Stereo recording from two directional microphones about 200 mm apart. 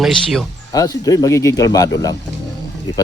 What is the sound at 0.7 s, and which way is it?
Speech, 20° left (ahead or behind).